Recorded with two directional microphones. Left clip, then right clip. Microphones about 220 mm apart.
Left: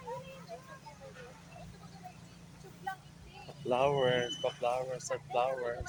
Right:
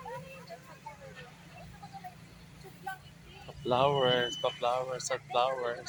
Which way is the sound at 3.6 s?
20° right (ahead or behind).